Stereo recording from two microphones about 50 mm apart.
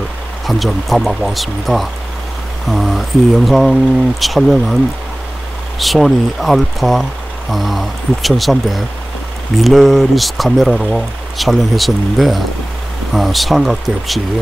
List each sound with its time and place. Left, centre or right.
0.5 s speech: centre
5.8 s speech: centre